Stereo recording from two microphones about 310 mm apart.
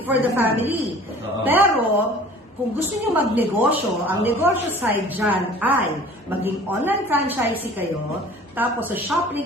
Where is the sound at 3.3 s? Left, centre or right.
Centre.